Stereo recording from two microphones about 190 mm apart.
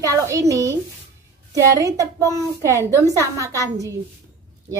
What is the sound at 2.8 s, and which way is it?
Speech, 10° left (ahead or behind).